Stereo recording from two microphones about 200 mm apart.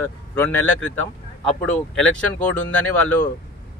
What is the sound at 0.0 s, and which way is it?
Speech, 10° left (ahead or behind).